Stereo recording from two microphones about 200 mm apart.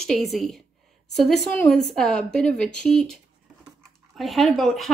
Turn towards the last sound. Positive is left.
turn(degrees=0)  # may be behind; listen again after turning